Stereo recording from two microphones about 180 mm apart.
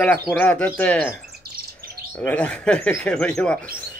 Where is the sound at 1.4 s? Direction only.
60° right (ahead or behind).